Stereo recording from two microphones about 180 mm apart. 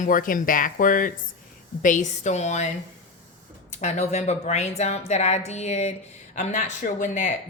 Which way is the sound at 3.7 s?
40° left (ahead or behind).